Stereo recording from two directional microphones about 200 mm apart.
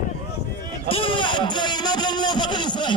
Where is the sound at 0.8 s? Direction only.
25° left (ahead or behind).